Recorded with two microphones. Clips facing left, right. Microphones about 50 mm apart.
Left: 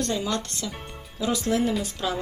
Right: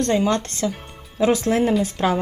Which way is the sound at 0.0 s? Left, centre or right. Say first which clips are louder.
Right 7 dB; right.